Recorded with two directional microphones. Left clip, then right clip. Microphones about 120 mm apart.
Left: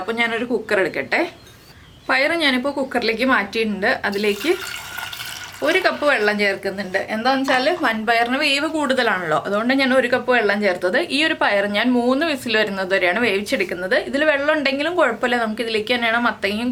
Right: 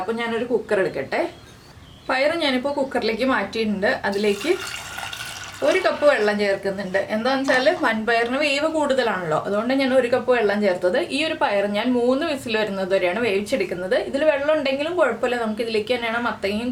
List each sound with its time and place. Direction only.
0.2 s a woman's voice: 25° left (ahead or behind)
5.6 s a woman's voice: 20° left (ahead or behind)